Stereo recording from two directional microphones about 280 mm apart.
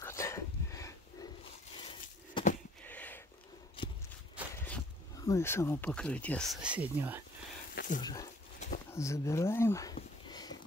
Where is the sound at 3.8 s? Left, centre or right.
Centre.